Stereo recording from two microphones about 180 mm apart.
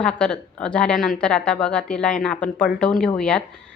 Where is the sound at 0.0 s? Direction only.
5° left (ahead or behind).